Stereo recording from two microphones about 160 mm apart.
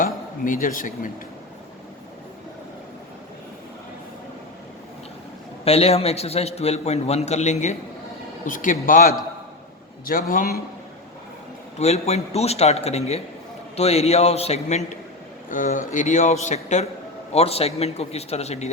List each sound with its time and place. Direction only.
0.0 s speech: 55° left (ahead or behind)
5.6 s a man's voice: 40° left (ahead or behind); by 9.0 s 55° left (ahead or behind)
10.1 s speech: 60° left (ahead or behind)
11.8 s a man's voice: 45° left (ahead or behind)
15.4 s a man's voice: 55° left (ahead or behind)